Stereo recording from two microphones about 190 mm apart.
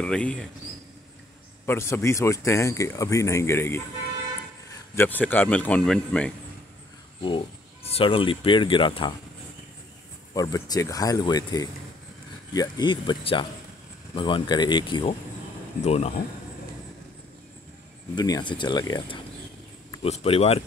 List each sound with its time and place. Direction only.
0.0 s speech: 5° left (ahead or behind)
1.7 s speech: 15° left (ahead or behind)
4.9 s speech: 10° left (ahead or behind)
7.2 s speech: 25° left (ahead or behind)
10.3 s speech: 20° left (ahead or behind); by 16.1 s 35° left (ahead or behind)
18.1 s speech: 20° left (ahead or behind)